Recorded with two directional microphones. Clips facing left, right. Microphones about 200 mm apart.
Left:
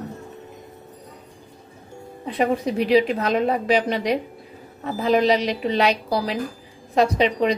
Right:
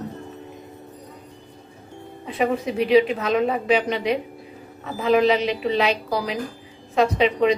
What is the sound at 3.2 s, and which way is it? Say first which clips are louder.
Speech: even; 40° left (ahead or behind).